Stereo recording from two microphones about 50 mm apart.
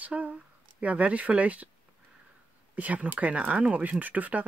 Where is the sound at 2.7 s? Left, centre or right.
Right.